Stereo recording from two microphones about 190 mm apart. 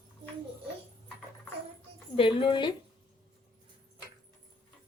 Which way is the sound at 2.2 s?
30° left (ahead or behind).